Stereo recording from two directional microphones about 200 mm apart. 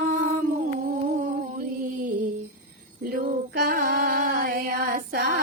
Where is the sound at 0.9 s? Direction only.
45° right (ahead or behind).